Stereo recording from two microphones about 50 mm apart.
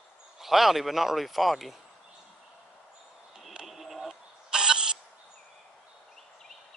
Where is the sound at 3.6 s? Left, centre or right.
Centre.